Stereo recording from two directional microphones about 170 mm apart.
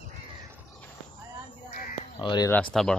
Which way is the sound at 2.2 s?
25° left (ahead or behind).